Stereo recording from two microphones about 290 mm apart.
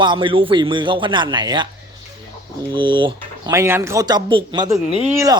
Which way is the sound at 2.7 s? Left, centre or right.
Centre.